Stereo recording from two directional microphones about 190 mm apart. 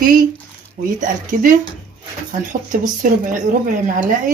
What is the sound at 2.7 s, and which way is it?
Speech, 45° right (ahead or behind).